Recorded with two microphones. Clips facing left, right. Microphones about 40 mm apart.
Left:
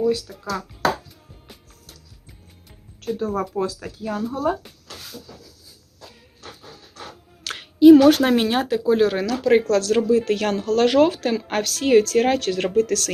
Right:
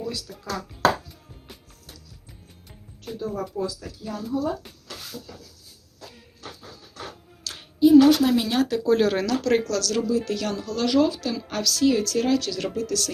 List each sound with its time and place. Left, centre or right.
0.3 s speech: centre
3.2 s a woman's voice: left
7.4 s a sound: left
7.9 s a woman's voice: left
8.4 s speech: left
8.9 s speech: centre
9.6 s a woman's voice: left